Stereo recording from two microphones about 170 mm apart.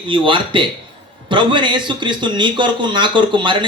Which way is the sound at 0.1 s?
30° right (ahead or behind).